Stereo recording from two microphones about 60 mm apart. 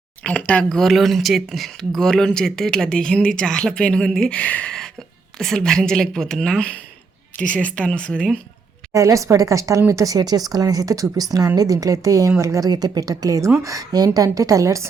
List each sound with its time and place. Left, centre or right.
0.2 s speech: left
0.6 s speech: centre; by 4.7 s left
5.5 s speech: centre
8.9 s a woman's voice: right
9.9 s a woman's voice: right